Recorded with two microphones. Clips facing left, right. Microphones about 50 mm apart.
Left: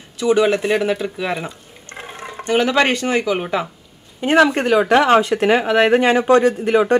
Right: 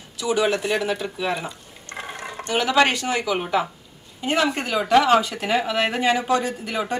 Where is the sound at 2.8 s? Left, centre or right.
Left.